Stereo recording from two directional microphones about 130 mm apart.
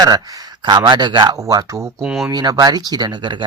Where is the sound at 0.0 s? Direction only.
30° right (ahead or behind).